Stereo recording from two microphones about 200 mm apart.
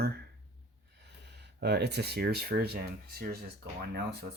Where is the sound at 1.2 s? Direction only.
55° right (ahead or behind).